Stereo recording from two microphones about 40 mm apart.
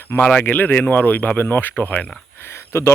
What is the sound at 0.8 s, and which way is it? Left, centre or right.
Speech, left.